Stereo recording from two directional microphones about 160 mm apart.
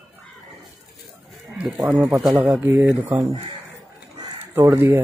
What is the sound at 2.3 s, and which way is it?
Speech, 15° right (ahead or behind).